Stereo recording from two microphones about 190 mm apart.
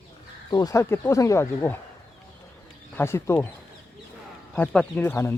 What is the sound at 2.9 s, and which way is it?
Speech, 10° left (ahead or behind).